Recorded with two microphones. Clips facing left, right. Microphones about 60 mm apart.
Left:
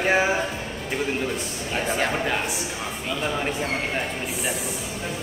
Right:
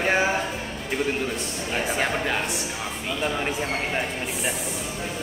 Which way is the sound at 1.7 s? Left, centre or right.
Centre.